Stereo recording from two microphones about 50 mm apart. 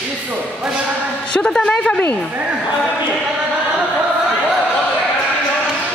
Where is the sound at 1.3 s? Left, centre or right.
Centre.